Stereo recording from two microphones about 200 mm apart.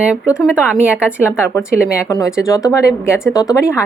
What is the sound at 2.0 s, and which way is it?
Speech, 15° left (ahead or behind).